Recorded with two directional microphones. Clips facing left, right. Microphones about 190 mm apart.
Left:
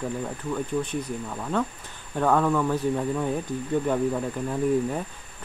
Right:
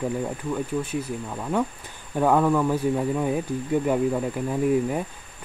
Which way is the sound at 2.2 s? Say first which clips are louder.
Right 2 dB; 10° right (ahead or behind).